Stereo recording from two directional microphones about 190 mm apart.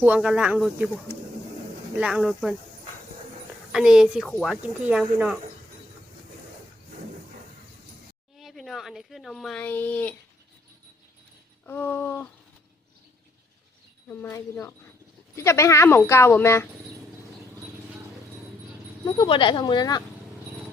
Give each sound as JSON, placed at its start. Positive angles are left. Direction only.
{"t": 0.0, "sound": "speech", "side_deg": -5}
{"t": 2.0, "sound": "speech", "side_deg": -5}
{"t": 3.7, "sound": "speech", "side_deg": -5}
{"t": 4.7, "sound": "speech", "side_deg": -5}
{"t": 8.4, "sound": "speech", "side_deg": 0}
{"t": 11.6, "sound": "a woman's voice", "side_deg": 10}
{"t": 14.1, "sound": "a woman's voice", "side_deg": 10}
{"t": 19.0, "sound": "speech", "side_deg": 25}